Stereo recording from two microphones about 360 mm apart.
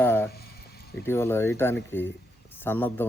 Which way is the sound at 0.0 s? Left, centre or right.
Centre.